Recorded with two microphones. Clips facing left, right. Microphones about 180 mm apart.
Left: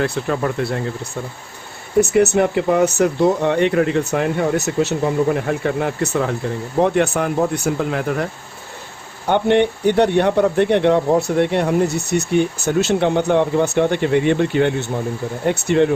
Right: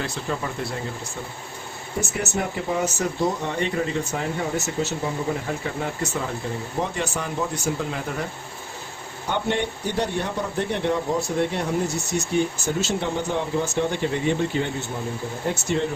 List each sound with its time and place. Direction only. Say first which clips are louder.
0.0 s speech: left 8 dB; 60° left (ahead or behind)
2.0 s speech: left 13 dB; 65° left (ahead or behind)
9.2 s speech: left 10 dB; 60° left (ahead or behind)